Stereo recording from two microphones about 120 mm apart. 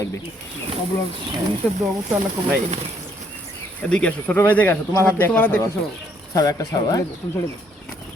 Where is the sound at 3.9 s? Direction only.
10° left (ahead or behind).